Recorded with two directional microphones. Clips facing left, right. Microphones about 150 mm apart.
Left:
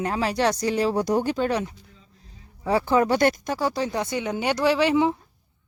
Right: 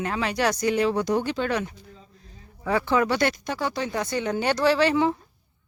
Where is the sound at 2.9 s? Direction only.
45° left (ahead or behind).